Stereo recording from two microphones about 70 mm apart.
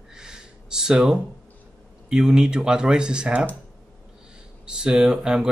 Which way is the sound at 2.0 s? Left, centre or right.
Centre.